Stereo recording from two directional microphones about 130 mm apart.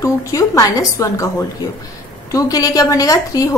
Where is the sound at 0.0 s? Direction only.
25° left (ahead or behind).